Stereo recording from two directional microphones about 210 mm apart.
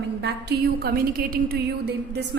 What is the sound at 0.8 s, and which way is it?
A woman's voice, 45° right (ahead or behind).